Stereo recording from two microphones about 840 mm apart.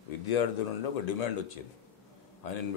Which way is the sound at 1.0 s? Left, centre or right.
Left.